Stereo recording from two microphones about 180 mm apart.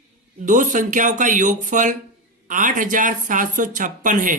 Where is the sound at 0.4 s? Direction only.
45° right (ahead or behind).